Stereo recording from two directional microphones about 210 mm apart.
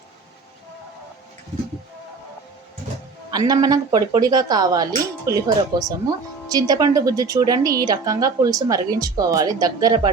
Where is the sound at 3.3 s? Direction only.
20° right (ahead or behind).